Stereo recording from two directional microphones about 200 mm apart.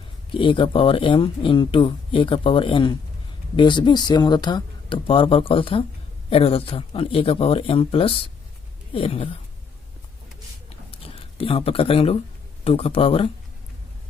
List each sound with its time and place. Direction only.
0.3 s speech: 25° left (ahead or behind)
10.7 s a sound: 30° left (ahead or behind)
12.6 s speech: 30° left (ahead or behind)